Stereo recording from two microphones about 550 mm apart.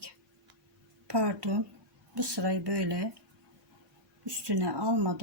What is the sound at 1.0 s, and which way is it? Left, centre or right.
A woman's voice, right.